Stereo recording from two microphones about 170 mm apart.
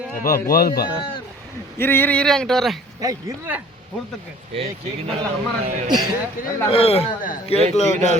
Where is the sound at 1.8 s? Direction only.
10° left (ahead or behind).